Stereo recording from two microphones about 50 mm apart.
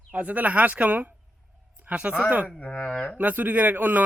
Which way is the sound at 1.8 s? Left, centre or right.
Right.